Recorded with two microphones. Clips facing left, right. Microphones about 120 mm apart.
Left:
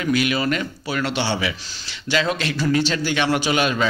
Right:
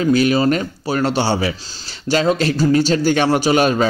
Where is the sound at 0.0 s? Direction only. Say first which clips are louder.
Right 6 dB; 35° right (ahead or behind).